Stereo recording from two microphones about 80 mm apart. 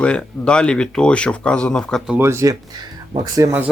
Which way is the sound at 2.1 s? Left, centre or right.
Right.